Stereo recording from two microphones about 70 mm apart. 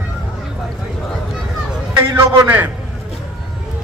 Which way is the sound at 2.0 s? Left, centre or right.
Right.